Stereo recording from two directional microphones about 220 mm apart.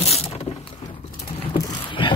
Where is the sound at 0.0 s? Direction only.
25° left (ahead or behind).